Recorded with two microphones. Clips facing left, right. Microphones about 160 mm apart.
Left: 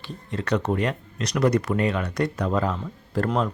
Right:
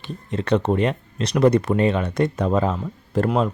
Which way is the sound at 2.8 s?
10° right (ahead or behind).